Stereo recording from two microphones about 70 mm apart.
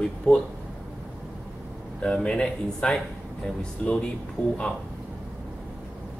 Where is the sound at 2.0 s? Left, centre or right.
Centre.